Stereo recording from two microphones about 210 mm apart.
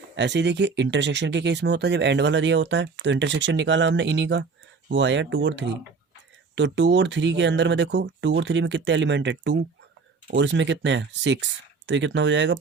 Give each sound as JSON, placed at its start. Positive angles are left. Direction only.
{"t": 0.2, "sound": "speech", "side_deg": -55}